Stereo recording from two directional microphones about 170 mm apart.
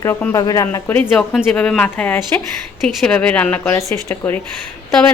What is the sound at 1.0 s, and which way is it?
A woman's voice, 5° left (ahead or behind).